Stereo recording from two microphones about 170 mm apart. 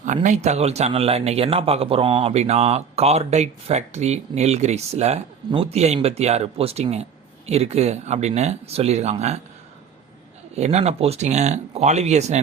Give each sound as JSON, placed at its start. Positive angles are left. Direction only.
{"t": 0.0, "sound": "speech", "side_deg": -45}
{"t": 10.5, "sound": "speech", "side_deg": -40}